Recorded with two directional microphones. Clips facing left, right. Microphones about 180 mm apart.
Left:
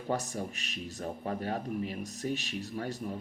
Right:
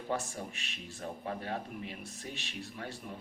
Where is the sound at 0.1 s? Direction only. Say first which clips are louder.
Left 4 dB; 40° left (ahead or behind).